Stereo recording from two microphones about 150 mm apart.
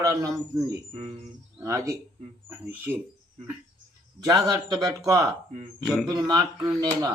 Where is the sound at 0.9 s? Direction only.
45° right (ahead or behind).